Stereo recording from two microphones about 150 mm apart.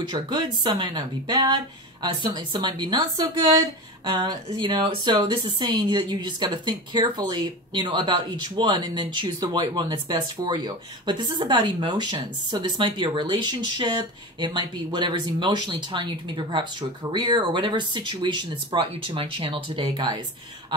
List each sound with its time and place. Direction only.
0.1 s speech: 30° right (ahead or behind)